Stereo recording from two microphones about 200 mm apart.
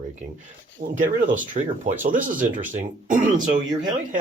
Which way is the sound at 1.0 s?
40° right (ahead or behind).